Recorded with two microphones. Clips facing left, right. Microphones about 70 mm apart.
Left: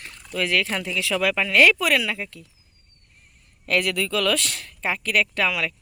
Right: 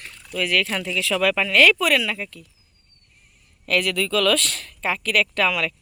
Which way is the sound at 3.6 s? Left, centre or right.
Left.